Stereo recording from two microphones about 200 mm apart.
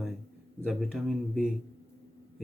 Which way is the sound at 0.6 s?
Centre (ahead or behind).